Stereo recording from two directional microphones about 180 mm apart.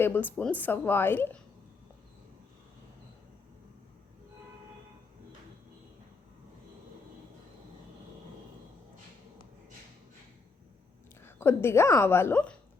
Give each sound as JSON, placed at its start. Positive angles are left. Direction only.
{"t": 0.0, "sound": "a woman's voice", "side_deg": 10}
{"t": 11.2, "sound": "a woman's voice", "side_deg": 15}